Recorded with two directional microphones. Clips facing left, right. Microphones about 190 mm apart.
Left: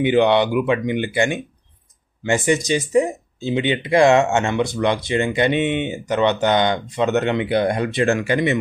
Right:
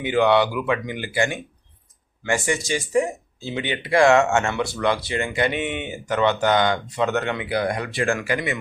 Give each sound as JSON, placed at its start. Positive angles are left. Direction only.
{"t": 0.0, "sound": "speech", "side_deg": 20}